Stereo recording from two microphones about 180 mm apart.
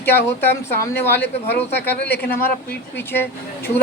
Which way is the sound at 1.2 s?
65° left (ahead or behind).